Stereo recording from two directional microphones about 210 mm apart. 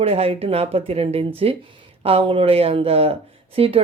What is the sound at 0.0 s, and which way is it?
Speech, 30° right (ahead or behind).